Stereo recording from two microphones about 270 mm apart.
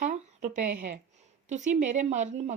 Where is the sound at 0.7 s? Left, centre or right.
Right.